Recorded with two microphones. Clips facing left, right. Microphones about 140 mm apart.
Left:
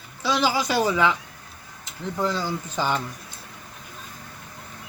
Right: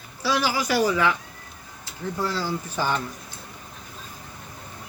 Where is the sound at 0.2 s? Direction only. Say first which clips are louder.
Left 1 dB; 20° left (ahead or behind).